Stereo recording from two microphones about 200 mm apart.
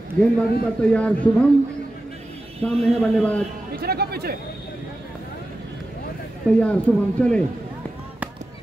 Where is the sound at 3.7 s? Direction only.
50° right (ahead or behind).